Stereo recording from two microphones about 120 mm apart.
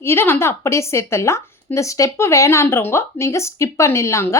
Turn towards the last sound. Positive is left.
turn(degrees=25)  # may be behind; listen again after turning